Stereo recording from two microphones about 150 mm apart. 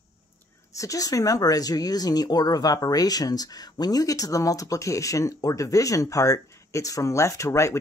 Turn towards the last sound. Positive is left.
turn(degrees=20)  # may be behind; listen again after turning